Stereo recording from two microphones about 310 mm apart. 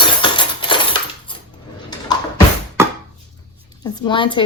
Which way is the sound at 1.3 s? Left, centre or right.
Centre.